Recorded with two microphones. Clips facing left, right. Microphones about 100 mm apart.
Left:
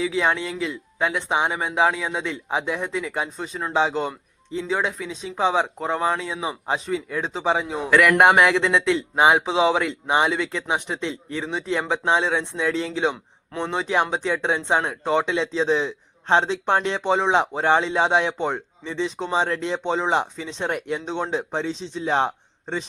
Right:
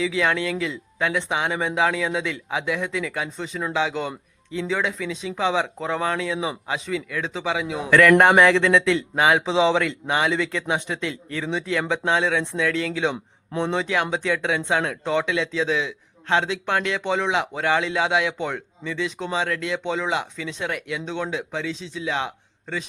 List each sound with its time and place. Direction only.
0.0 s speech: 15° left (ahead or behind)
3.7 s speech: 30° left (ahead or behind)
7.9 s speech: 10° left (ahead or behind)
13.5 s speech: 20° right (ahead or behind)
13.7 s speech: 20° left (ahead or behind)
21.3 s speech: 35° left (ahead or behind)